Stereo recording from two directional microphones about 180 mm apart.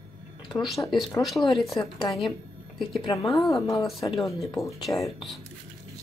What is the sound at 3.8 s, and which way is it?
Speech, centre (ahead or behind).